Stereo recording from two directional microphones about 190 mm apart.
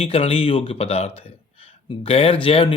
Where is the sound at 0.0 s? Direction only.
30° left (ahead or behind).